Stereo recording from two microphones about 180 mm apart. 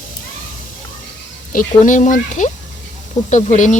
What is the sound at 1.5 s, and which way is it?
Speech, 45° left (ahead or behind).